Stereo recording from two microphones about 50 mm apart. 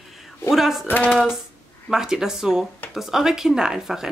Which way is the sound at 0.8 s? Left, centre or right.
Left.